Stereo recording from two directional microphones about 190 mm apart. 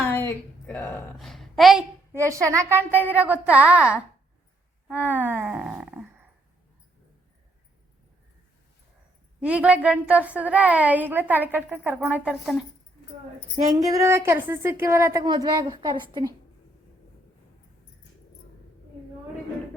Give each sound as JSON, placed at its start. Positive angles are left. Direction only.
{"t": 0.1, "sound": "a woman's voice", "side_deg": 10}
{"t": 2.1, "sound": "a woman's voice", "side_deg": -15}
{"t": 4.9, "sound": "a sound", "side_deg": -10}
{"t": 9.4, "sound": "a woman's voice", "side_deg": -5}
{"t": 13.7, "sound": "a woman's voice", "side_deg": -15}